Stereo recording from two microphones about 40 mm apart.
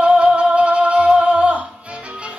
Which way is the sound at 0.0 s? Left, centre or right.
Right.